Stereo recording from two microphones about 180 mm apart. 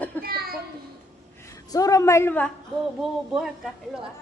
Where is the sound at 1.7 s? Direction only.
20° left (ahead or behind).